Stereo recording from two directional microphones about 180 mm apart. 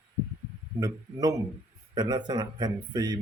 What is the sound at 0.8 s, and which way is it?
A man's voice, 20° right (ahead or behind).